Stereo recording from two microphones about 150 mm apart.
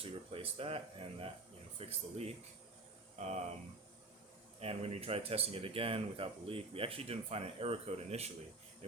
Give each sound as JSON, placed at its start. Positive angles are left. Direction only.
{"t": 0.0, "sound": "speech", "side_deg": -40}
{"t": 4.6, "sound": "speech", "side_deg": -40}